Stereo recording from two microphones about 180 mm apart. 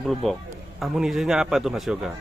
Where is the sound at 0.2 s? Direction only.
Centre (ahead or behind).